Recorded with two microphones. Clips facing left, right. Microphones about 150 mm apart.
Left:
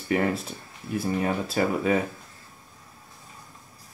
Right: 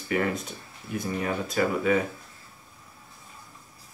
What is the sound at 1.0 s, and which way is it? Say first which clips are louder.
Speech: left 3 dB; 30° left (ahead or behind).